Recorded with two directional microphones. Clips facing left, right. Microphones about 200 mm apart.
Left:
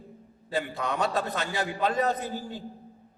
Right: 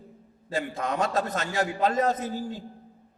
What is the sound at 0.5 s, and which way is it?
A man's voice, 45° right (ahead or behind).